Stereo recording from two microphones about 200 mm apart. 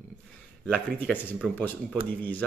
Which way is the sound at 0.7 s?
5° left (ahead or behind).